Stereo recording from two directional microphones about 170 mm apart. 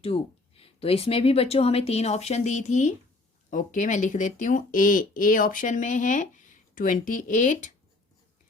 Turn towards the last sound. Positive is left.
turn(degrees=50)  # may be behind; listen again after turning